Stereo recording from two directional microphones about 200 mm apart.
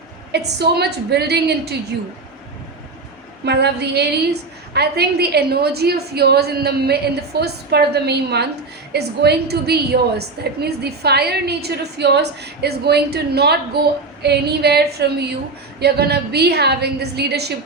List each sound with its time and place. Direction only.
0.3 s a woman's voice: 55° right (ahead or behind)
3.4 s a woman's voice: 55° right (ahead or behind)